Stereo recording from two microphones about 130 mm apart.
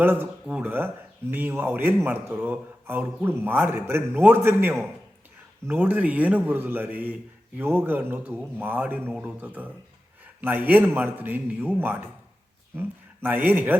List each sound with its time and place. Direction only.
0.0 s speech: 15° right (ahead or behind)
13.2 s speech: 15° right (ahead or behind)